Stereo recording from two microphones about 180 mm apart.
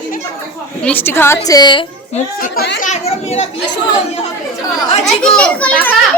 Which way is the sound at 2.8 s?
40° left (ahead or behind).